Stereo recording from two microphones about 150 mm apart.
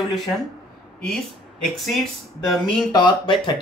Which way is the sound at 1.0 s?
Centre (ahead or behind).